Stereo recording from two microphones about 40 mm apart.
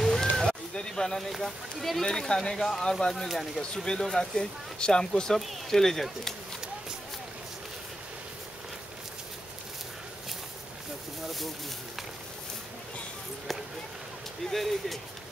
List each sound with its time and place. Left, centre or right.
0.0 s a sound: centre
1.4 s speech: centre
3.7 s speech: centre
14.5 s speech: centre